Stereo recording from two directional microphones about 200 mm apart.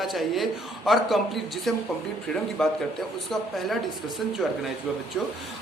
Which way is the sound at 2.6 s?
5° left (ahead or behind).